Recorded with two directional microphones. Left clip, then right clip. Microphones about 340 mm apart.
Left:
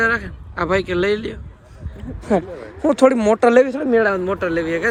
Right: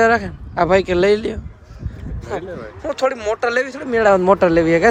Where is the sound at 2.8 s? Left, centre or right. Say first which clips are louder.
Left 5 dB; centre.